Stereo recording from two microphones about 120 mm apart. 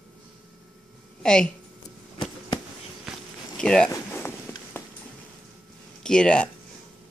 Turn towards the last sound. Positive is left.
turn(degrees=10)  # may be behind; listen again after turning